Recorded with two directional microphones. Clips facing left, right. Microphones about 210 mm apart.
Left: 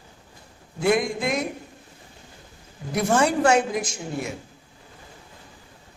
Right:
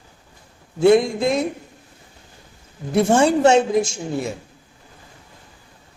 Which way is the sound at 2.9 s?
25° right (ahead or behind).